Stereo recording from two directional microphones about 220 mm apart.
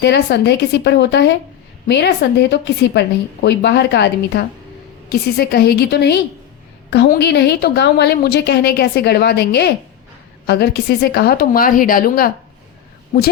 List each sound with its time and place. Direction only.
0.0 s a woman's voice: 50° left (ahead or behind)